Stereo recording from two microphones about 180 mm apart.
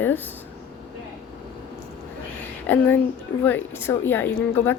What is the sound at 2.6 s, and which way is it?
A woman's voice, 10° left (ahead or behind).